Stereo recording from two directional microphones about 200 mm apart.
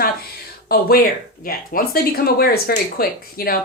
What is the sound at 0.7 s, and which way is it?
Speech, 50° left (ahead or behind).